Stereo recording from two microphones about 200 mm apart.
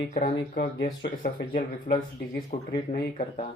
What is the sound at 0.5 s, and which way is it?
Speech, 50° left (ahead or behind).